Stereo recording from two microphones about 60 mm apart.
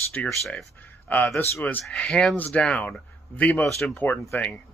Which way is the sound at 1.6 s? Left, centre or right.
Left.